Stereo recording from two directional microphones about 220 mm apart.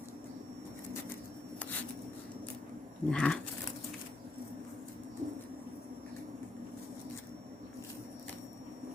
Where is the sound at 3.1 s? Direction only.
5° left (ahead or behind).